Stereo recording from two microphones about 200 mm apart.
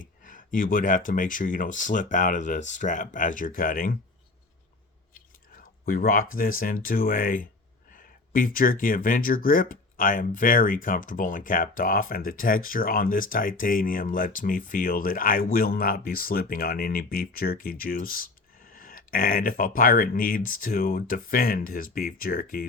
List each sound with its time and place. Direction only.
0.0 s speech: 40° left (ahead or behind)
5.6 s a sound: 45° left (ahead or behind)
6.3 s speech: 45° left (ahead or behind)